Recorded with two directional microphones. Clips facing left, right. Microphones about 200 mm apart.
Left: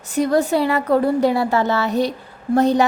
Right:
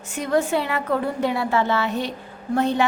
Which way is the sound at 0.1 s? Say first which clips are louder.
Left 4 dB; 35° left (ahead or behind).